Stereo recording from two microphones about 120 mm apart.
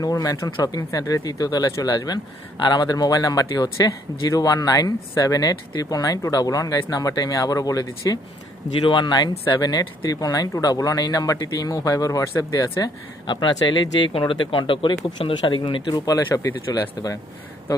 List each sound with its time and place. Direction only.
0.0 s speech: 30° left (ahead or behind)
8.8 s speech: 45° left (ahead or behind)
13.2 s speech: 40° left (ahead or behind)
16.0 s speech: 30° left (ahead or behind)